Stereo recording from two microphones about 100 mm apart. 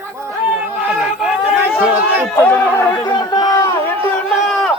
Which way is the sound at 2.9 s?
40° left (ahead or behind).